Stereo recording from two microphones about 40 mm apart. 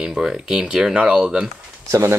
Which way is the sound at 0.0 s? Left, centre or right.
Centre.